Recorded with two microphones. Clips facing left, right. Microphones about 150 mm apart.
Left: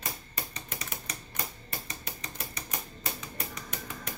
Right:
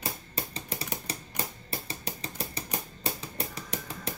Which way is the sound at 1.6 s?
30° right (ahead or behind).